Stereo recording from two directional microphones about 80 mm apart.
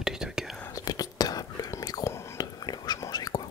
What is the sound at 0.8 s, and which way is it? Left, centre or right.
Whispering, left.